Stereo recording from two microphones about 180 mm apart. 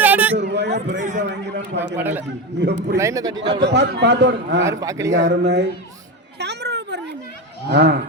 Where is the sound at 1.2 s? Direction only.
75° right (ahead or behind).